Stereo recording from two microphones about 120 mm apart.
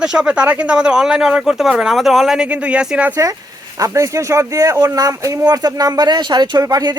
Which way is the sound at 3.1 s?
30° right (ahead or behind).